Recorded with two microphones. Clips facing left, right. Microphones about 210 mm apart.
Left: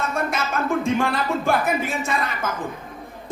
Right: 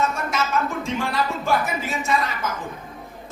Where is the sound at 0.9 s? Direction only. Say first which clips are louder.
Left 2 dB; 55° left (ahead or behind).